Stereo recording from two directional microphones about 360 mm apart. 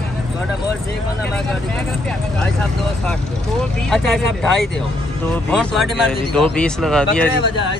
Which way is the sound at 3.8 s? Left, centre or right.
Centre.